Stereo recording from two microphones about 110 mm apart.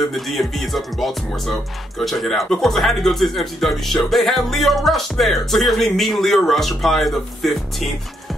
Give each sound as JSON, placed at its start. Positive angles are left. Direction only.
{"t": 0.1, "sound": "speech", "side_deg": 0}